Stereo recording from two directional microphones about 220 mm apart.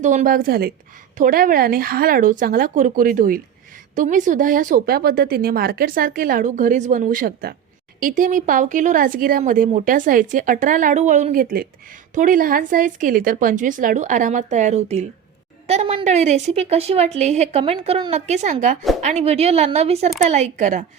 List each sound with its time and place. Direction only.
0.0 s a woman's voice: 35° right (ahead or behind)